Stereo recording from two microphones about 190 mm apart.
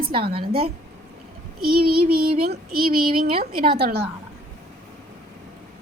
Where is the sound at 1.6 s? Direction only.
55° right (ahead or behind).